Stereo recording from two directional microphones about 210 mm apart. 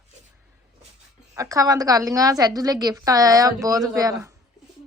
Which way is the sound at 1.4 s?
15° right (ahead or behind).